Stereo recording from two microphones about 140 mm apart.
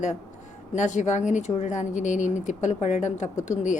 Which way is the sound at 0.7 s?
60° left (ahead or behind).